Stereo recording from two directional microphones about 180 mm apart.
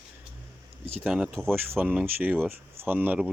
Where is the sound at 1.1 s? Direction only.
5° right (ahead or behind).